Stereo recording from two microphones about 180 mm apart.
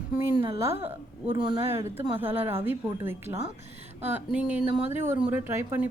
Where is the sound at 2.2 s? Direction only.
10° right (ahead or behind).